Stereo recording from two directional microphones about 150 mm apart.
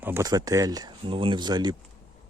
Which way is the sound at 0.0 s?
20° right (ahead or behind).